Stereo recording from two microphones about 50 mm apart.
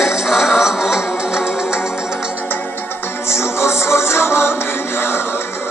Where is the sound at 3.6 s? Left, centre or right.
Left.